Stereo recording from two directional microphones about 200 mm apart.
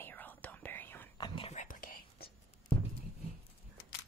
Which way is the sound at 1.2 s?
25° left (ahead or behind).